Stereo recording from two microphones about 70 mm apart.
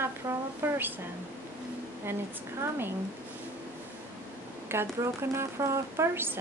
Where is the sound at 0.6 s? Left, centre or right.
Right.